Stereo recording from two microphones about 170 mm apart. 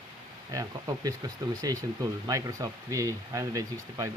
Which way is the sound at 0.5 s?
20° right (ahead or behind).